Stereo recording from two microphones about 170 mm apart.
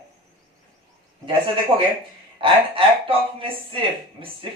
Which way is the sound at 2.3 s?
30° right (ahead or behind).